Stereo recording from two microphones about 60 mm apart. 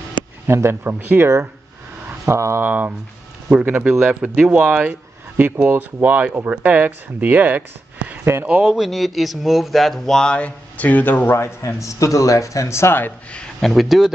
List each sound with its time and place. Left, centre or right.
0.5 s speech: right
0.8 s speech: right
2.2 s speech: right
2.6 s speech: right
3.8 s speech: centre
4.5 s speech: right
8.6 s speech: centre
10.3 s speech: left
11.3 s speech: left
13.6 s speech: centre